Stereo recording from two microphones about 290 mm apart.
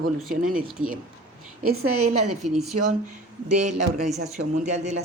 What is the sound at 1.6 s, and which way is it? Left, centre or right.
Speech, right.